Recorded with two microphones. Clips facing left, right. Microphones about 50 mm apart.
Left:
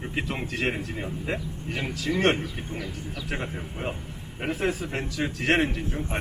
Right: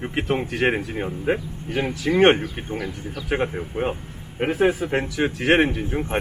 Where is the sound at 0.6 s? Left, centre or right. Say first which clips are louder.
Right 7 dB; right.